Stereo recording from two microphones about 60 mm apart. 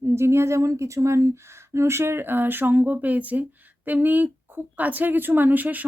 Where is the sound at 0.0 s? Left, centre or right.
Right.